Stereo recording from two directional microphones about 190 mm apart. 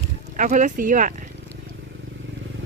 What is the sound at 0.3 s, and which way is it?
Speech, 40° right (ahead or behind).